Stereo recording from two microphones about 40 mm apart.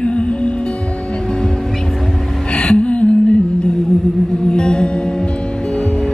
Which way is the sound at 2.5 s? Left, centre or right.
Left.